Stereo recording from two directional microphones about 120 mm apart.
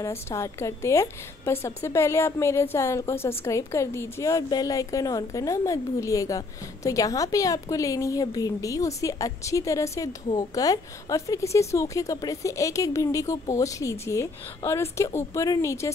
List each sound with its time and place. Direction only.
0.0 s a woman's voice: 25° left (ahead or behind)